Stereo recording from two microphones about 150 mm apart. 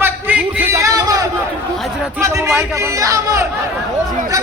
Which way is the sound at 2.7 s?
20° right (ahead or behind).